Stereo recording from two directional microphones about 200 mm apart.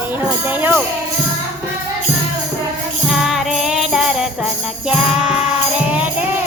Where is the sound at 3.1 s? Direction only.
Centre (ahead or behind).